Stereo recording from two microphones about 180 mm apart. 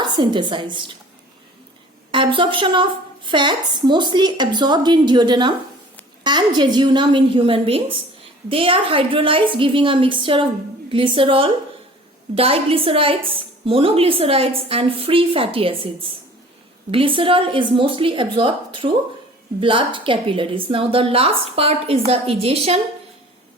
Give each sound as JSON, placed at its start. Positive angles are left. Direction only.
{"t": 0.0, "sound": "a woman's voice", "side_deg": -25}
{"t": 2.1, "sound": "a woman's voice", "side_deg": -30}
{"t": 16.9, "sound": "a woman's voice", "side_deg": -30}